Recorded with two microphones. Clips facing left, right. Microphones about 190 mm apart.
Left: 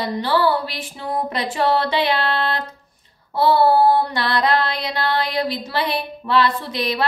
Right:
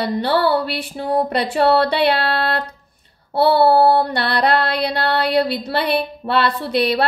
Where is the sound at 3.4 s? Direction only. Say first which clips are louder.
Right 2 dB; 60° right (ahead or behind).